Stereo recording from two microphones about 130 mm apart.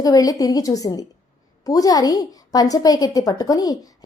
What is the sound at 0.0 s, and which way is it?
A woman's voice, 30° left (ahead or behind).